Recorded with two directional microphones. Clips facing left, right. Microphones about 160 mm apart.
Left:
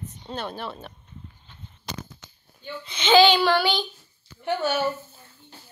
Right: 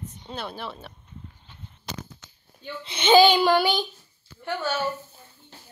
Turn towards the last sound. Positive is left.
turn(degrees=15)  # may be behind; listen again after turning